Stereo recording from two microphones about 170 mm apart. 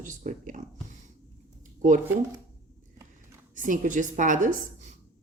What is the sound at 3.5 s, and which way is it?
Speech, 50° right (ahead or behind).